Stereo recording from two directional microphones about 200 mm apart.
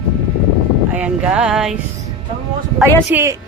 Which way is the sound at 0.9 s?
5° right (ahead or behind).